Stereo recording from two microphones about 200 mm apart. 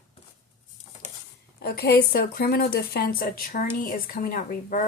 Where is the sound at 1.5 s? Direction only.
50° left (ahead or behind).